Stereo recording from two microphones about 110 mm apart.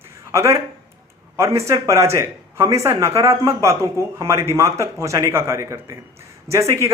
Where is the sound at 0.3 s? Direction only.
25° right (ahead or behind).